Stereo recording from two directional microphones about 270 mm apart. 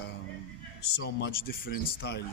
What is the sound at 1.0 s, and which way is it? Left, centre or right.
Speech, left.